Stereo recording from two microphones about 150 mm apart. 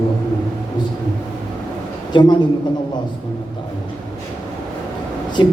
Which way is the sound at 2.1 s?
30° left (ahead or behind).